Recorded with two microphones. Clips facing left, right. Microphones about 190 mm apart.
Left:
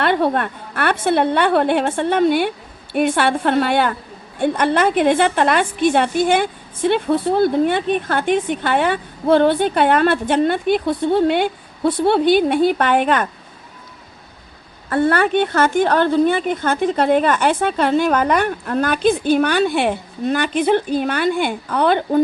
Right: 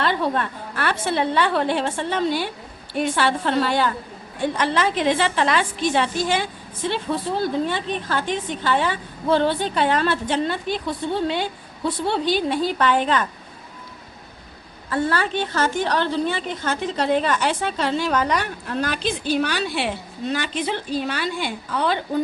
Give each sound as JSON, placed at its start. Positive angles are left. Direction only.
{"t": 0.0, "sound": "a woman's voice", "side_deg": 60}
{"t": 14.8, "sound": "a woman's voice", "side_deg": 60}